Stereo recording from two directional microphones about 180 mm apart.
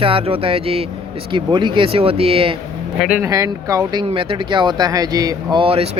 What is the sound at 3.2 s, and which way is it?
Speech, 20° right (ahead or behind).